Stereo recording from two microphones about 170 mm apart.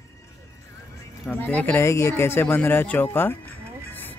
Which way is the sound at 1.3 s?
10° left (ahead or behind).